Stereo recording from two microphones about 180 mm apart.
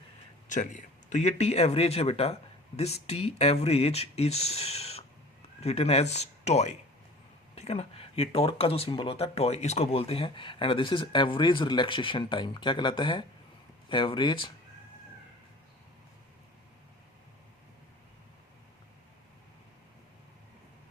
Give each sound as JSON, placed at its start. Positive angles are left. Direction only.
{"t": 0.4, "sound": "speech", "side_deg": 45}